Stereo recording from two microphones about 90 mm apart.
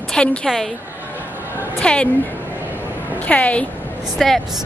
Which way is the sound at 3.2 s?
15° left (ahead or behind).